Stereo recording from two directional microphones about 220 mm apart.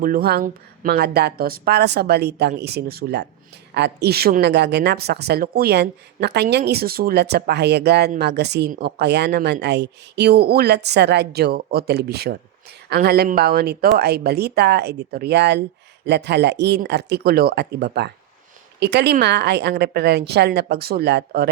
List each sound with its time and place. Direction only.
0.0 s speech: 40° right (ahead or behind)